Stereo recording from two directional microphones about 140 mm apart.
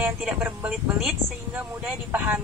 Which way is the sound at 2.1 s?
15° right (ahead or behind).